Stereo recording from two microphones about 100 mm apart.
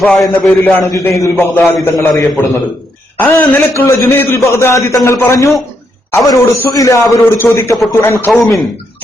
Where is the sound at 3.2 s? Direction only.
20° left (ahead or behind).